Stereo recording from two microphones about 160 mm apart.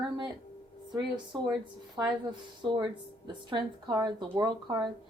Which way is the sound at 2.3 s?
30° right (ahead or behind).